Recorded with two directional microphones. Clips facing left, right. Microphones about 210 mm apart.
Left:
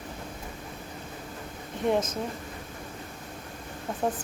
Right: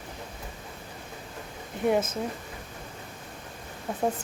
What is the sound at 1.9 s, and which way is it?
Speech, 5° right (ahead or behind).